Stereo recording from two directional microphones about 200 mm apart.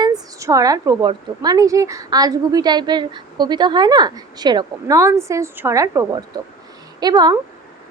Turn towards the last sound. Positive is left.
turn(degrees=-20)  # may be behind; listen again after turning